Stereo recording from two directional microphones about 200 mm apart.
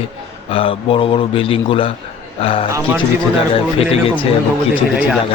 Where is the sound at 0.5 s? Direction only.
25° left (ahead or behind).